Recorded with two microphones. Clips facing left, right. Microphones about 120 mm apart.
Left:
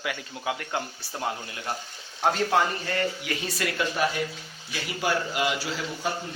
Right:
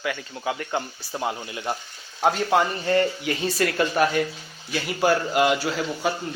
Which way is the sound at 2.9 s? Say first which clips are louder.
Right 9 dB; 30° right (ahead or behind).